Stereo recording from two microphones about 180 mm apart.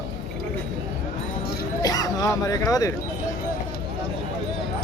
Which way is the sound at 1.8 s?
20° left (ahead or behind).